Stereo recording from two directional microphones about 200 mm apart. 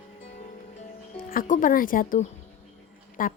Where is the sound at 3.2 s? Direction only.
45° left (ahead or behind).